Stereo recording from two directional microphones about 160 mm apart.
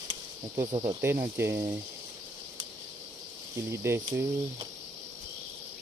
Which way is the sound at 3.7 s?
15° right (ahead or behind).